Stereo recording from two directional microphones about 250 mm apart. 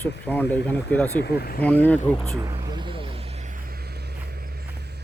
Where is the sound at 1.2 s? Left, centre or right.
Left.